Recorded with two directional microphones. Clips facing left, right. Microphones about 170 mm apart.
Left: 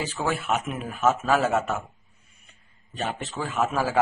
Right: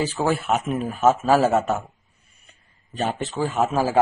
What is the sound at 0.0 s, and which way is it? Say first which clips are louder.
A man's voice: right 5 dB; 35° right (ahead or behind).